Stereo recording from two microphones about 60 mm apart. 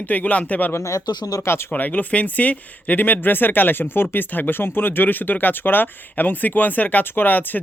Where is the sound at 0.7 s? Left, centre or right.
Left.